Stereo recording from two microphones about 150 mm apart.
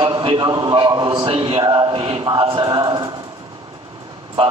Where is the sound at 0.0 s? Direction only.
35° right (ahead or behind).